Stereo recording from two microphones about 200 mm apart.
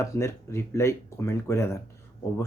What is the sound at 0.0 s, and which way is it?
Speech, 15° left (ahead or behind).